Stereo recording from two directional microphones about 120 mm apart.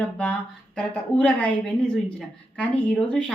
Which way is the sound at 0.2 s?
10° left (ahead or behind).